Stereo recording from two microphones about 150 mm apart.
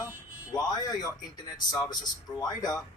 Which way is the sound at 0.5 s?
25° left (ahead or behind).